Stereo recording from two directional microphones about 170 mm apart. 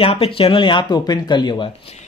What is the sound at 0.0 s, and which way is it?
Speech, 35° left (ahead or behind).